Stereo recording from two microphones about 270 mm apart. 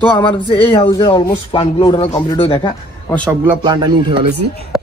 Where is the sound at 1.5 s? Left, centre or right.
Centre.